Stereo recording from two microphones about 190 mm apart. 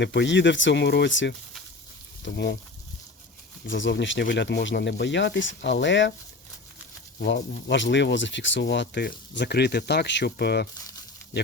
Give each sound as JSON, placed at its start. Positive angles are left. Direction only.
{"t": 0.0, "sound": "speech", "side_deg": 65}
{"t": 3.7, "sound": "speech", "side_deg": 70}
{"t": 7.2, "sound": "speech", "side_deg": 65}